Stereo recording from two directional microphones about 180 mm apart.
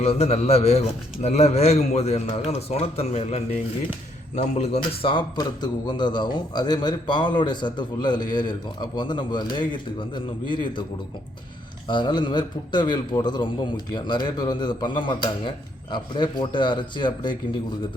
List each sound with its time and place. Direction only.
0.0 s speech: 35° left (ahead or behind)
4.8 s a man's voice: 25° left (ahead or behind)
11.9 s a man's voice: 25° left (ahead or behind)